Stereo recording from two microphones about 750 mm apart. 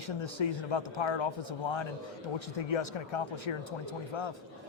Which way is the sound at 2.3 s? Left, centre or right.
Left.